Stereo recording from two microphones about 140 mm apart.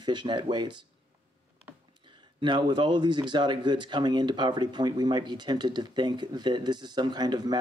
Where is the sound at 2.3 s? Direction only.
35° right (ahead or behind).